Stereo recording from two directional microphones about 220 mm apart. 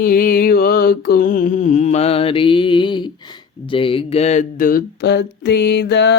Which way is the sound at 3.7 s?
25° left (ahead or behind).